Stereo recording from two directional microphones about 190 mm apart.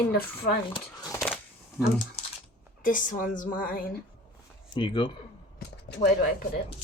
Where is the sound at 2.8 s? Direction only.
45° left (ahead or behind).